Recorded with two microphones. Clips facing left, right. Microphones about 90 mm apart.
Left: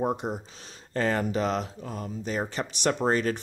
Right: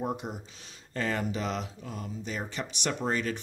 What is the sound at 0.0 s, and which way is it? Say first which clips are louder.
Speech: left 5 dB; 35° left (ahead or behind).